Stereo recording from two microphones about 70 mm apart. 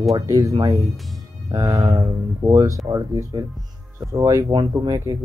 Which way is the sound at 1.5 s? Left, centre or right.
Right.